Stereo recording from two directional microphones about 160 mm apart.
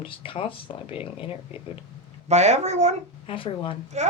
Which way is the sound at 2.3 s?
45° right (ahead or behind).